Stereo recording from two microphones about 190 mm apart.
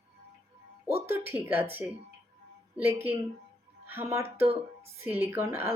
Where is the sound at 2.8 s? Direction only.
10° right (ahead or behind).